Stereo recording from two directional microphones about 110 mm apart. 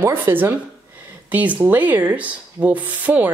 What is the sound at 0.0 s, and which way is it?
Speech, 20° right (ahead or behind).